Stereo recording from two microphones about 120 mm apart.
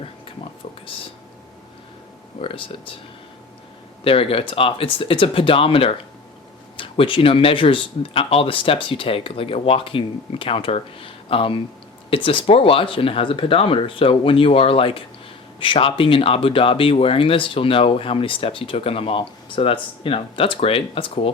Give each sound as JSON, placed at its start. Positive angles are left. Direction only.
{"t": 2.4, "sound": "speech", "side_deg": 50}
{"t": 4.0, "sound": "speech", "side_deg": 50}